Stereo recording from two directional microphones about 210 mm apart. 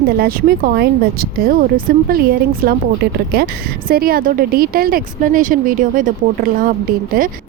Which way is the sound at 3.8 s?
45° right (ahead or behind).